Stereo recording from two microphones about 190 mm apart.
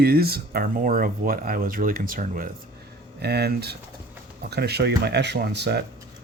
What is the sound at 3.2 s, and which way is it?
Speech, 60° right (ahead or behind).